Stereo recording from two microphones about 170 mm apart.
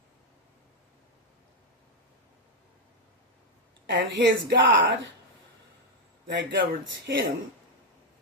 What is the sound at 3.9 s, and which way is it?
Speech, 90° right.